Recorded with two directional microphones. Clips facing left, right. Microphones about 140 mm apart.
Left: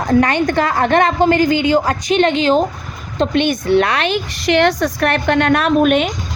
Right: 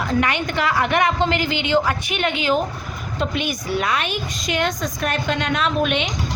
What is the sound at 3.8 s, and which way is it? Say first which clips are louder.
A woman's voice: left 5 dB; 70° left (ahead or behind).